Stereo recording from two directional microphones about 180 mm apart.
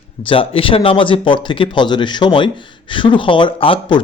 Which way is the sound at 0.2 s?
30° left (ahead or behind).